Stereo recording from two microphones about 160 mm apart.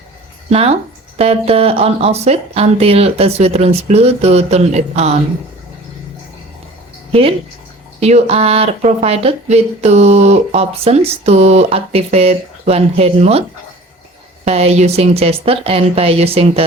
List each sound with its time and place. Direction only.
0.5 s speech: 40° right (ahead or behind)
7.1 s speech: 35° right (ahead or behind)
14.4 s speech: 40° right (ahead or behind)